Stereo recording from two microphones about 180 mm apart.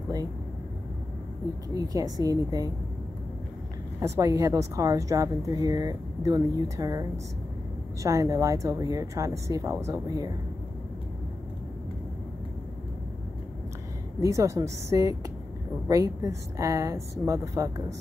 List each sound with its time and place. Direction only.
1.7 s a woman's voice: 20° right (ahead or behind)
4.0 s a woman's voice: 15° right (ahead or behind)
14.2 s a woman's voice: 20° right (ahead or behind)